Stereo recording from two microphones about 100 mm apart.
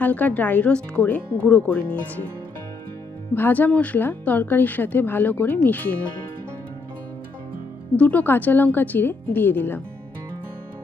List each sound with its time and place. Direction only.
0.0 s speech: 15° left (ahead or behind)
3.3 s speech: 15° left (ahead or behind)
7.9 s speech: 15° left (ahead or behind)